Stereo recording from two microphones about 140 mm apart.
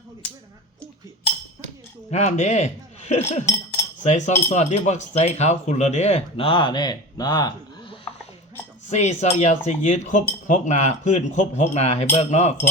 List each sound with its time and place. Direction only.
2.0 s speech: 55° left (ahead or behind); by 7.9 s 30° left (ahead or behind)
8.9 s speech: 55° left (ahead or behind)